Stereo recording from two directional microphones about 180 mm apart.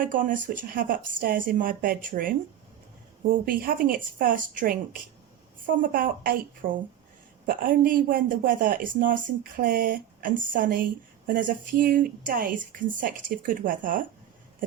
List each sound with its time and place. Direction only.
0.0 s speech: 50° right (ahead or behind)